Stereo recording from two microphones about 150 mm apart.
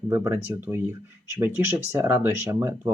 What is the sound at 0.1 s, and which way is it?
Speech, 15° right (ahead or behind).